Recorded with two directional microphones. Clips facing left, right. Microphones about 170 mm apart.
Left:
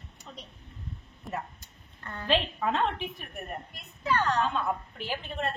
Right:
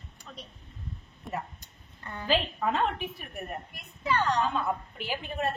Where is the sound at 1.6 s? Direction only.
15° right (ahead or behind).